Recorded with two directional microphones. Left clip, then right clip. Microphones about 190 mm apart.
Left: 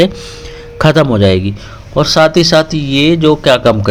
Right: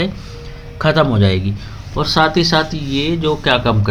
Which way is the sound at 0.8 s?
45° left (ahead or behind).